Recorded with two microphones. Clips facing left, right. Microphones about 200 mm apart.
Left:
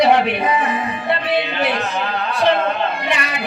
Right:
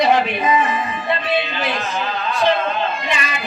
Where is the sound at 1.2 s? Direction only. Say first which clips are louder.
Left 2 dB; 65° left (ahead or behind).